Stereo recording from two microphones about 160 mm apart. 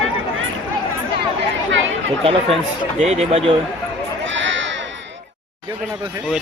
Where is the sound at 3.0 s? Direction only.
40° right (ahead or behind).